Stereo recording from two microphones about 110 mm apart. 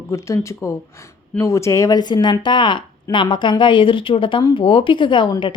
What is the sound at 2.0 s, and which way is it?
A woman's voice, 40° left (ahead or behind).